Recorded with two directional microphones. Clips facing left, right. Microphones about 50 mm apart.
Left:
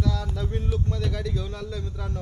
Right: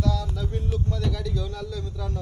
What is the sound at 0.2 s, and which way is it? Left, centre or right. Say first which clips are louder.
Music: even; left.